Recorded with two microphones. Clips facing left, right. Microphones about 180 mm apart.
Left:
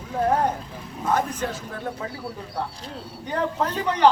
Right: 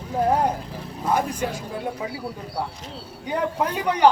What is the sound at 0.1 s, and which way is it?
Vehicle, 10° right (ahead or behind).